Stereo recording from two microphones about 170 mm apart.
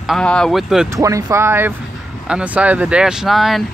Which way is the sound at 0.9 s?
20° right (ahead or behind).